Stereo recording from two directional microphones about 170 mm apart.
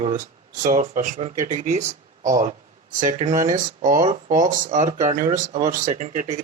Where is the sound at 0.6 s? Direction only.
50° right (ahead or behind).